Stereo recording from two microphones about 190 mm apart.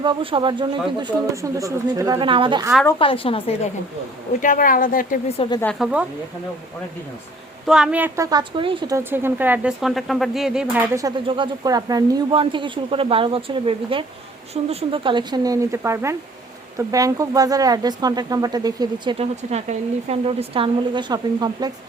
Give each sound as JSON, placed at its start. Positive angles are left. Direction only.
{"t": 0.0, "sound": "speech", "side_deg": -25}
{"t": 3.0, "sound": "a woman's voice", "side_deg": 30}
{"t": 4.4, "sound": "speech", "side_deg": 45}
{"t": 5.8, "sound": "a woman's voice", "side_deg": -5}
{"t": 7.7, "sound": "a woman's voice", "side_deg": -5}
{"t": 9.0, "sound": "speech", "side_deg": -10}
{"t": 10.9, "sound": "speech", "side_deg": -20}
{"t": 19.2, "sound": "speech", "side_deg": -35}